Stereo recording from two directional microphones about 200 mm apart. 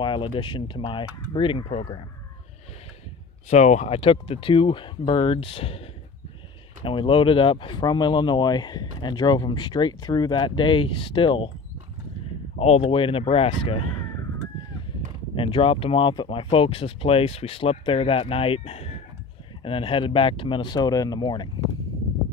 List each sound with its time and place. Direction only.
0.0 s speech: 25° left (ahead or behind)
3.4 s speech: 35° left (ahead or behind)
6.8 s speech: 25° left (ahead or behind)
12.5 s speech: 30° left (ahead or behind)
15.3 s speech: 25° left (ahead or behind)